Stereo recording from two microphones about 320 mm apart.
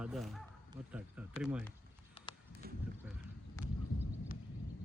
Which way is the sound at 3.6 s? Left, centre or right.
Centre.